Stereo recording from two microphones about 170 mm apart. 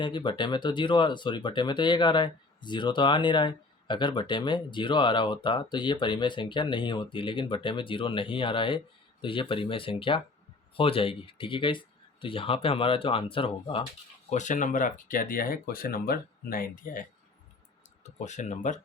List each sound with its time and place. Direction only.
0.0 s speech: 30° left (ahead or behind)
14.3 s speech: 45° left (ahead or behind)